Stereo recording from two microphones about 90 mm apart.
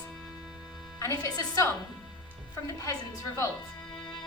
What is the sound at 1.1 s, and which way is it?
Speech, 45° left (ahead or behind).